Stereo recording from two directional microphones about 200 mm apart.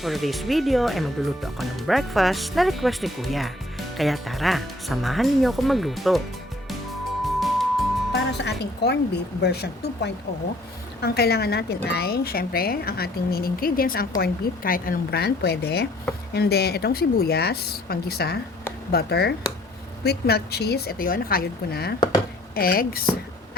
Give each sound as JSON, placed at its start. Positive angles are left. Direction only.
{"t": 0.0, "sound": "speech", "side_deg": 0}
{"t": 7.3, "sound": "music", "side_deg": 0}
{"t": 8.1, "sound": "a woman's voice", "side_deg": 60}